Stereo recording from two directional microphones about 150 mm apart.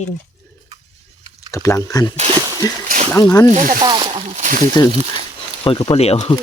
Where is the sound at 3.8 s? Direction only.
30° right (ahead or behind).